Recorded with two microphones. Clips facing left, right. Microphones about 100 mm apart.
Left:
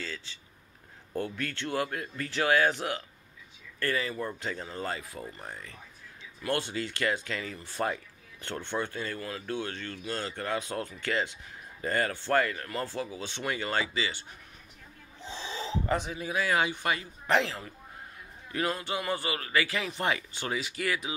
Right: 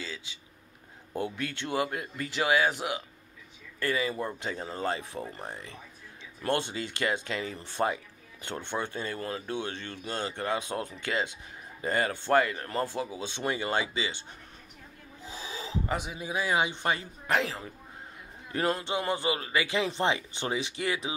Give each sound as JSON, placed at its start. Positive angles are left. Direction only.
{"t": 0.0, "sound": "speech", "side_deg": -10}
{"t": 15.3, "sound": "speech", "side_deg": -10}
{"t": 18.5, "sound": "speech", "side_deg": -30}